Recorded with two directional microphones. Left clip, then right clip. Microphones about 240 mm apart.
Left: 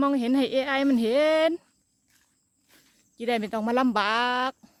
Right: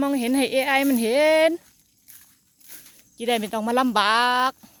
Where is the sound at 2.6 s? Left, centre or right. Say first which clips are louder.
Right 11 dB; right.